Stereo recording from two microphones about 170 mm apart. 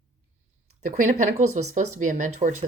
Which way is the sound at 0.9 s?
40° right (ahead or behind).